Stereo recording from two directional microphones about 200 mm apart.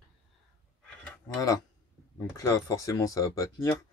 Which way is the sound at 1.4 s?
20° left (ahead or behind).